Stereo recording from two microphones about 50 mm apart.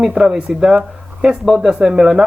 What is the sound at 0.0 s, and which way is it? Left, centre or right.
A man's voice, centre.